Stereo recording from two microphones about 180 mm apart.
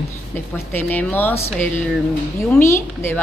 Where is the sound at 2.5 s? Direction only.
15° left (ahead or behind).